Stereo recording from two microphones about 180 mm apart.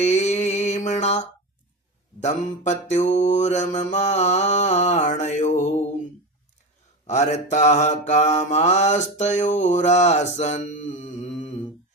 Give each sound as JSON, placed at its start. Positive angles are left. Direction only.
{"t": 0.0, "sound": "mantra", "side_deg": 40}
{"t": 7.1, "sound": "mantra", "side_deg": 40}